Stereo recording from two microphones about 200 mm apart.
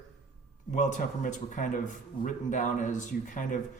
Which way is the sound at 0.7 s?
40° left (ahead or behind).